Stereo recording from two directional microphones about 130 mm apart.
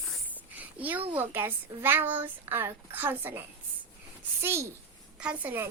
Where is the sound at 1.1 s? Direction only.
15° right (ahead or behind).